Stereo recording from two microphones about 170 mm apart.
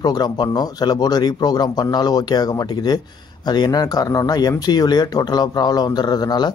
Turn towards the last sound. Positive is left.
turn(degrees=25)  # may be behind; listen again after turning